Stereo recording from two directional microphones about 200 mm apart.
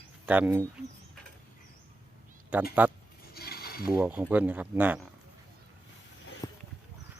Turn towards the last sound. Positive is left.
turn(degrees=20)  # may be behind; listen again after turning